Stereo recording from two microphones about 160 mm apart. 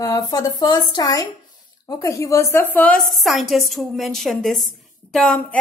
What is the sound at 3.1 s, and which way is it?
A woman's voice, centre (ahead or behind).